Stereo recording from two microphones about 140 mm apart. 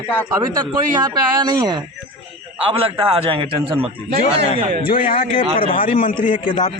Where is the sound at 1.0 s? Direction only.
30° right (ahead or behind).